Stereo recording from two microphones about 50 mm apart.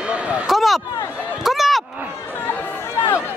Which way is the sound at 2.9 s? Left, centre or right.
Left.